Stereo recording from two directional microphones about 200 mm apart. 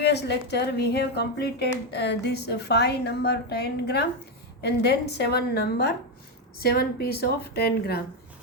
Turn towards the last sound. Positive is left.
turn(degrees=50)  # may be behind; listen again after turning